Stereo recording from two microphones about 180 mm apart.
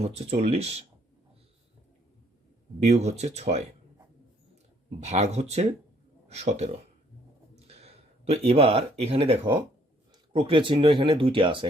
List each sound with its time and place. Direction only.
0.0 s speech: 35° right (ahead or behind)
2.8 s speech: 40° right (ahead or behind)
5.0 s speech: 35° right (ahead or behind)
7.7 s speech: 35° right (ahead or behind)